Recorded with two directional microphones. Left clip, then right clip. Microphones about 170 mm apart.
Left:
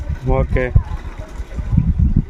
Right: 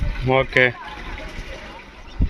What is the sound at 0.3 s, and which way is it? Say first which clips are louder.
Speech: right 4 dB; 10° left (ahead or behind).